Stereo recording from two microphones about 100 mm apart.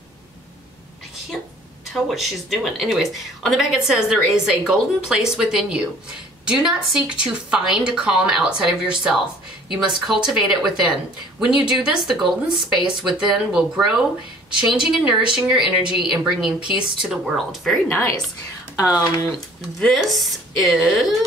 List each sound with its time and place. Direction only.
2.0 s speech: centre (ahead or behind)
17.8 s a woman's voice: 20° left (ahead or behind)
18.8 s speech: 35° left (ahead or behind)
19.8 s speech: centre (ahead or behind)